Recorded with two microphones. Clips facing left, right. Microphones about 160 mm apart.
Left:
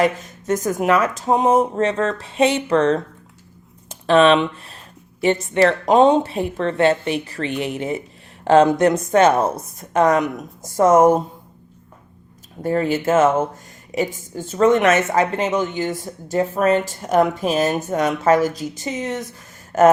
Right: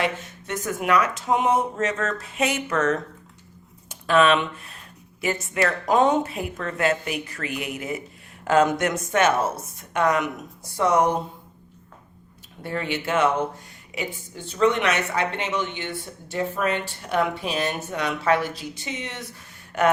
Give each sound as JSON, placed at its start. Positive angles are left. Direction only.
{"t": 0.0, "sound": "speech", "side_deg": 40}
{"t": 4.0, "sound": "a woman's voice", "side_deg": 30}
{"t": 12.6, "sound": "a woman's voice", "side_deg": 40}